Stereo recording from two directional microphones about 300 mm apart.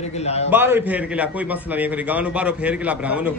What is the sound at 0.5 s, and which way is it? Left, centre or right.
A man's voice, centre.